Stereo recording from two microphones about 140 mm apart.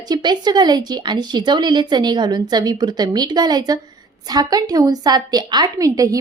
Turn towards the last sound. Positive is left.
turn(degrees=-25)  # may be behind; listen again after turning